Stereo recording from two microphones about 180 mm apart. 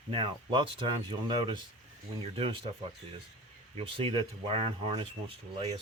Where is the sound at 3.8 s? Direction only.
30° right (ahead or behind).